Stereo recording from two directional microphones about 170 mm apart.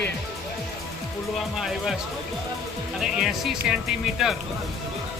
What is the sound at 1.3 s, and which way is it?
Speech, centre (ahead or behind).